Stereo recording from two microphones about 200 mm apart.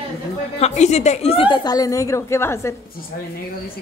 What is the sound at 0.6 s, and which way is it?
Speech, 35° left (ahead or behind).